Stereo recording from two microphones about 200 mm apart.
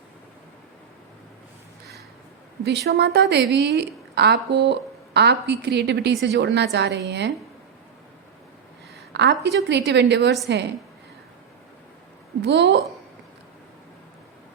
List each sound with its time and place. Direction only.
2.6 s a woman's voice: 55° right (ahead or behind)
9.1 s a woman's voice: 60° right (ahead or behind)
12.4 s a woman's voice: 60° right (ahead or behind)